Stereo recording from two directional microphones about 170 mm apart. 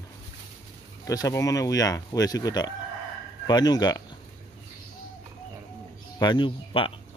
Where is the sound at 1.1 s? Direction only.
20° left (ahead or behind).